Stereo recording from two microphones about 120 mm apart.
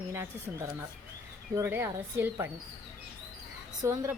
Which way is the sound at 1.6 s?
20° right (ahead or behind).